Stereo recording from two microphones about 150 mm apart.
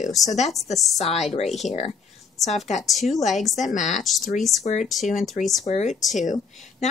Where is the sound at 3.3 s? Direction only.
Centre (ahead or behind).